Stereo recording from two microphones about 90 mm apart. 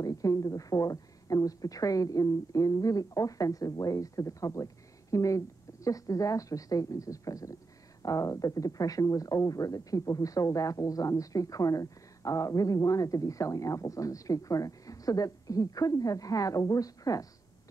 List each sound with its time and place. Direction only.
0.0 s speech: 40° left (ahead or behind)